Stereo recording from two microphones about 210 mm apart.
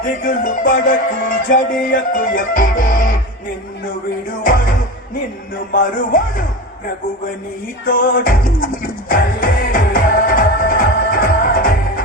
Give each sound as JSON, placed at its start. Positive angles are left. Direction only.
{"t": 0.0, "sound": "music", "side_deg": 40}
{"t": 5.7, "sound": "music", "side_deg": 40}
{"t": 7.9, "sound": "music", "side_deg": 40}